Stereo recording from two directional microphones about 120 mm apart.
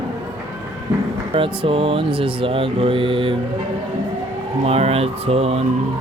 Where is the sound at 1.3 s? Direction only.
50° right (ahead or behind).